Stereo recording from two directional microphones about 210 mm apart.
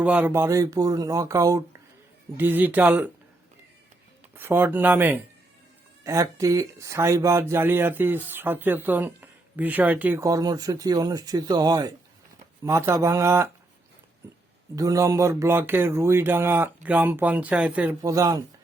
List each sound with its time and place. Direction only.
0.0 s speech: 5° right (ahead or behind)
4.4 s speech: 10° right (ahead or behind)
14.8 s speech: 15° right (ahead or behind)